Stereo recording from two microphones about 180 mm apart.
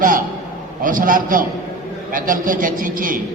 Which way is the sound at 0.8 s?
50° right (ahead or behind).